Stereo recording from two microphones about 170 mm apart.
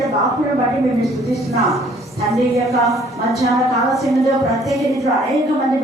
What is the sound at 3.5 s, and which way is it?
Speech, 20° right (ahead or behind).